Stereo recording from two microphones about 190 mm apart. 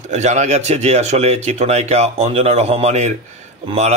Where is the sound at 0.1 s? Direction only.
35° right (ahead or behind).